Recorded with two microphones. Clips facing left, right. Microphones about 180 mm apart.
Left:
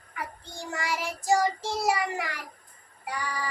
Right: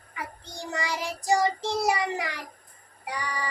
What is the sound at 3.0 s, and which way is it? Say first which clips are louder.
Music: even; 15° right (ahead or behind).